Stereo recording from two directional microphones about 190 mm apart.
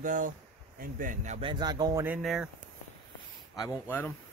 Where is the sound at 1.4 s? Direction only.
25° right (ahead or behind).